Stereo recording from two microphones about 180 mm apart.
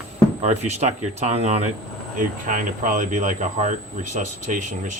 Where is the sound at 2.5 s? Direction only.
45° right (ahead or behind).